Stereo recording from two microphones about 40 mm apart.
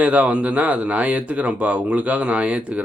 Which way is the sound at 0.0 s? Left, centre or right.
Right.